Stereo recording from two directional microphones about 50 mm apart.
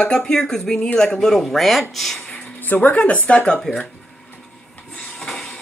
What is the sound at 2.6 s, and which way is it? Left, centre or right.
Speech, left.